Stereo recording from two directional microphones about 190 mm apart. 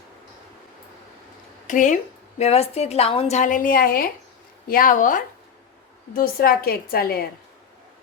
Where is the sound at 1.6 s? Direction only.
40° left (ahead or behind).